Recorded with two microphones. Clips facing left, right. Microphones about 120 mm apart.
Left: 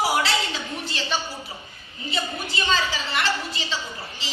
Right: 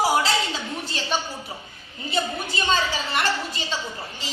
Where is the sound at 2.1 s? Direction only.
45° right (ahead or behind).